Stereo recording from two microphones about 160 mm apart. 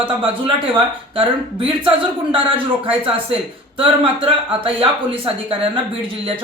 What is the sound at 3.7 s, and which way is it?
Speech, 35° right (ahead or behind).